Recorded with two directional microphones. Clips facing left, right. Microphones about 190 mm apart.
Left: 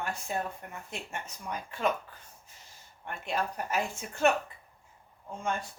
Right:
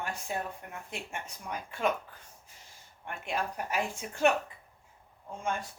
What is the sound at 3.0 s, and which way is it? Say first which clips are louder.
A woman's voice: left 1 dB; 10° right (ahead or behind).